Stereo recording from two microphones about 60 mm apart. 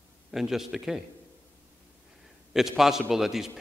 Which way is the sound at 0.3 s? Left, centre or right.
Centre.